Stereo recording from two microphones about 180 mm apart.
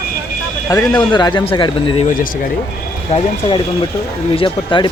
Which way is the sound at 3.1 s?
35° left (ahead or behind).